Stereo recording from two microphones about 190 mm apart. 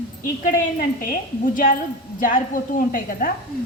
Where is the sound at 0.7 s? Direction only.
50° left (ahead or behind).